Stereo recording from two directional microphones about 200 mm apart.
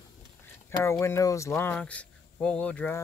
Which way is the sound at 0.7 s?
15° left (ahead or behind).